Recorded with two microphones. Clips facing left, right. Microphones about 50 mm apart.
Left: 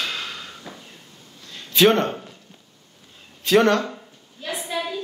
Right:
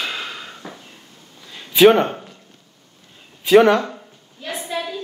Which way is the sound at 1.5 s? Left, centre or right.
Centre.